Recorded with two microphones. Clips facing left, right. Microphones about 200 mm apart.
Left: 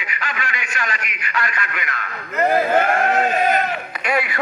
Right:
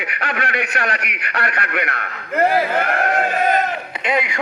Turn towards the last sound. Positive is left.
turn(degrees=-20)  # may be behind; listen again after turning